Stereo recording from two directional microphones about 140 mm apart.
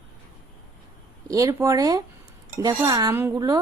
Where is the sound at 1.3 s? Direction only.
25° right (ahead or behind).